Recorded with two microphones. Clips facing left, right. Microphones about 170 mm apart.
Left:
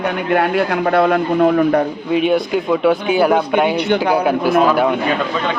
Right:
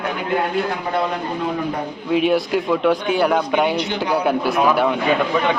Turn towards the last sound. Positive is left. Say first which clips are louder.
# left 4 dB
turn(degrees=0)  # may be behind; listen again after turning